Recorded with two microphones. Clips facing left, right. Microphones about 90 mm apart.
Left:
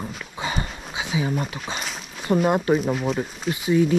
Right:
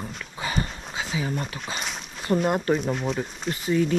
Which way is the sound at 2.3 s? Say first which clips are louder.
Left 3 dB; 25° left (ahead or behind).